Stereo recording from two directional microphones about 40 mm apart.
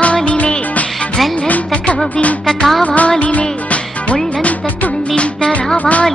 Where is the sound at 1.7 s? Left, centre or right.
Left.